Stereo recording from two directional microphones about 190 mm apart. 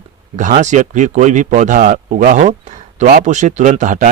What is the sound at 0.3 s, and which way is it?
A man's voice, 40° right (ahead or behind).